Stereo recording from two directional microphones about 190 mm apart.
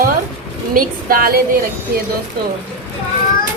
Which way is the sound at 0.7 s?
50° right (ahead or behind).